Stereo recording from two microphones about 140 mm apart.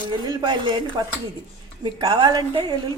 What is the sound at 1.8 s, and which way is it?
Speech, 30° right (ahead or behind).